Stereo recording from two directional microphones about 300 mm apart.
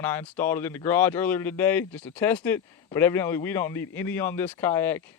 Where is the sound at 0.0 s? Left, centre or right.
Centre.